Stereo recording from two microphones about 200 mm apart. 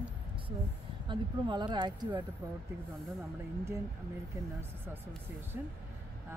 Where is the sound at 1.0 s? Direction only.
25° right (ahead or behind).